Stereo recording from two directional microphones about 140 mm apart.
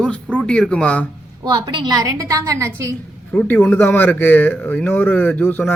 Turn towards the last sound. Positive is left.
turn(degrees=10)  # may be behind; listen again after turning